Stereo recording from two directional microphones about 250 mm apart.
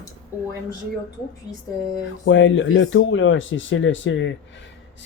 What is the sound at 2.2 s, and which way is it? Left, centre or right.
Speech, left.